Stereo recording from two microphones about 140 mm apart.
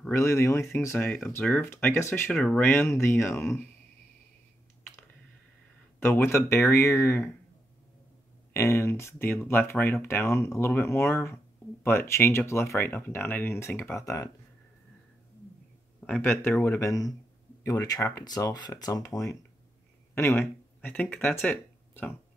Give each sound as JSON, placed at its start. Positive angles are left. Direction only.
{"t": 0.1, "sound": "speech", "side_deg": 20}
{"t": 2.3, "sound": "speech", "side_deg": 5}
{"t": 6.0, "sound": "speech", "side_deg": 15}
{"t": 8.5, "sound": "speech", "side_deg": 20}
{"t": 16.1, "sound": "speech", "side_deg": 15}